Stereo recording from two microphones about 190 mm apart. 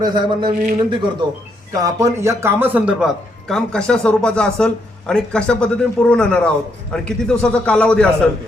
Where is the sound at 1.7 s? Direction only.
15° right (ahead or behind).